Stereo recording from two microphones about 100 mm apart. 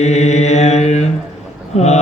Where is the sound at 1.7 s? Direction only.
90° left.